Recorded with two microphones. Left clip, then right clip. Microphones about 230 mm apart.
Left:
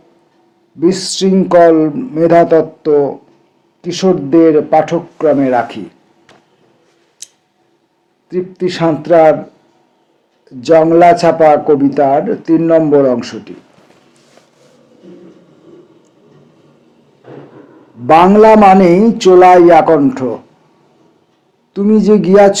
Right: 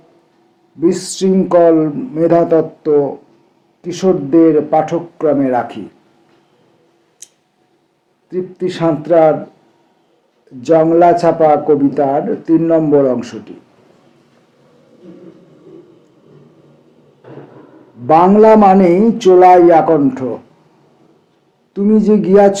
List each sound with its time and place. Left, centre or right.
0.8 s a man's voice: left
7.2 s scissors: left
8.3 s a man's voice: left
10.6 s a man's voice: left
18.0 s a man's voice: left
21.7 s a man's voice: left